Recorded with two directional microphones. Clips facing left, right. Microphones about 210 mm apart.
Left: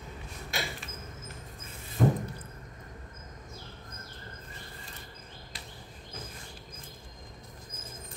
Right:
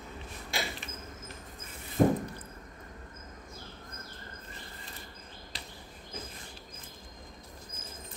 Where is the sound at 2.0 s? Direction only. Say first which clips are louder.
Right 2 dB; 35° right (ahead or behind).